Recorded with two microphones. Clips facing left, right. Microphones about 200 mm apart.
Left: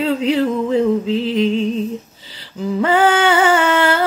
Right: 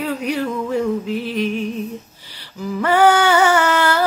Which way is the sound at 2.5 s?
25° left (ahead or behind).